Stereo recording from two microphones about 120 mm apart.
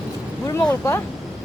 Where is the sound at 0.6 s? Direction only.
20° left (ahead or behind).